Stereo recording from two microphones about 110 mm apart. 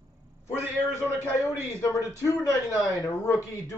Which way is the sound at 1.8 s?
30° left (ahead or behind).